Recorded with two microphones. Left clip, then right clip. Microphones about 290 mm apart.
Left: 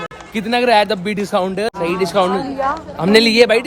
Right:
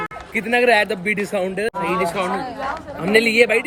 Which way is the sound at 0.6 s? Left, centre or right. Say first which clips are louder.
Left 4 dB; centre.